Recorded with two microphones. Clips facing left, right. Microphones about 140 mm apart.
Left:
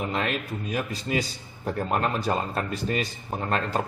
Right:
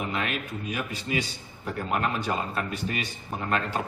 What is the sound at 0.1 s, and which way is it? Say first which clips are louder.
A man's voice: left 3 dB; 40° left (ahead or behind).